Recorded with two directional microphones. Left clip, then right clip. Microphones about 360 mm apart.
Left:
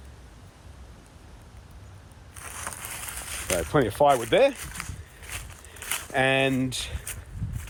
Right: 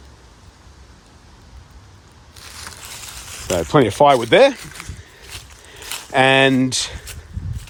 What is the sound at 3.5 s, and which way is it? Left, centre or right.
Speech, right.